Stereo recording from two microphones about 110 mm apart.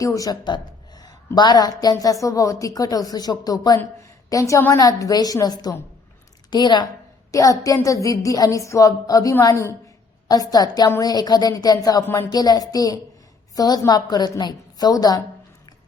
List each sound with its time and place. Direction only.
0.0 s a woman's voice: 30° left (ahead or behind)
7.3 s a woman's voice: 30° left (ahead or behind)
12.0 s a woman's voice: 20° left (ahead or behind)
12.3 s a woman's voice: 35° left (ahead or behind)